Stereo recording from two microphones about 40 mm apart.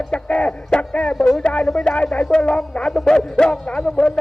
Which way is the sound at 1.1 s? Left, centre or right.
Centre.